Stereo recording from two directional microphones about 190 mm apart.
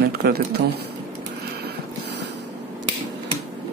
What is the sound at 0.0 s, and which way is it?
Speech, 55° right (ahead or behind).